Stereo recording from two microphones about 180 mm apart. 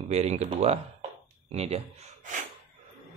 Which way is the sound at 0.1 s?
40° right (ahead or behind).